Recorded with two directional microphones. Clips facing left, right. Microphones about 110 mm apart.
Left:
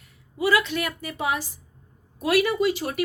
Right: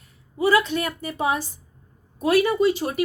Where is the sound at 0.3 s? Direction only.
30° right (ahead or behind).